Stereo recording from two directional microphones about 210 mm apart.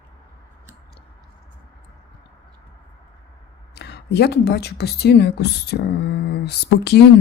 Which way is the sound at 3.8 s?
50° left (ahead or behind).